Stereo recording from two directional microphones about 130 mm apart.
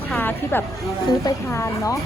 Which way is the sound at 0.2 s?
15° left (ahead or behind).